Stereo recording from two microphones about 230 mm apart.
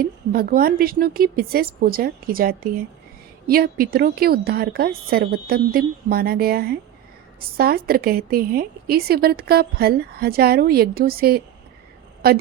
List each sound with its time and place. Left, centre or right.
0.0 s a woman's voice: right